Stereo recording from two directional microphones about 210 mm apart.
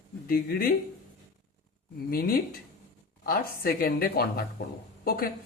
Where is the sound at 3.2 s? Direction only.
45° left (ahead or behind).